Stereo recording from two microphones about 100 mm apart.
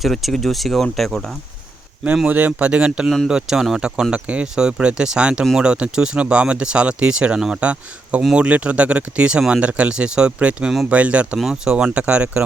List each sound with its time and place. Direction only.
0.0 s speech: centre (ahead or behind)
2.1 s speech: 15° right (ahead or behind)